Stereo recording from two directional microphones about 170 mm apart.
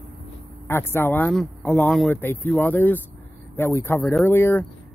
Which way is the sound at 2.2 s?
10° left (ahead or behind).